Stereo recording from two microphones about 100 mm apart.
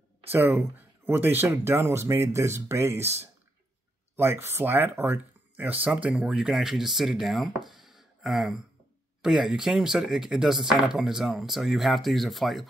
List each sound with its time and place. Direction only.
0.3 s speech: 20° right (ahead or behind)
4.2 s speech: 25° right (ahead or behind); by 12.6 s centre (ahead or behind)